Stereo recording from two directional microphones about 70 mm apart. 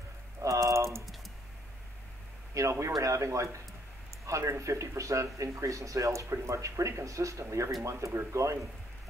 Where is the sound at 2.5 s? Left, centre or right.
Right.